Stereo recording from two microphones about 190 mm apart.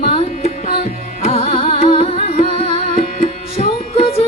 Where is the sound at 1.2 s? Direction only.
35° left (ahead or behind).